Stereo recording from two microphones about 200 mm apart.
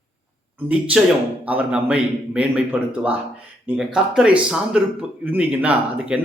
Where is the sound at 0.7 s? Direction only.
5° right (ahead or behind).